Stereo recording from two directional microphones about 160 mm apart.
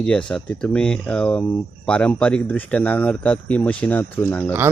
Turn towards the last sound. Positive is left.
turn(degrees=10)  # may be behind; listen again after turning